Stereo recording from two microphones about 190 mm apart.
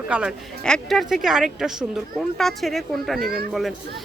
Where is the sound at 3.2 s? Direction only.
55° right (ahead or behind).